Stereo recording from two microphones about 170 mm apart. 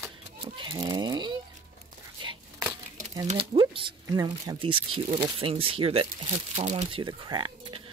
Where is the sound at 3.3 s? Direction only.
30° right (ahead or behind).